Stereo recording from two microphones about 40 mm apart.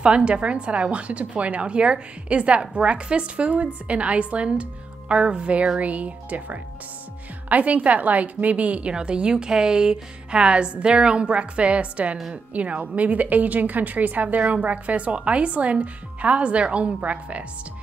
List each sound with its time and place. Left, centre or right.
0.0 s a woman's voice: right
8.9 s a woman's voice: right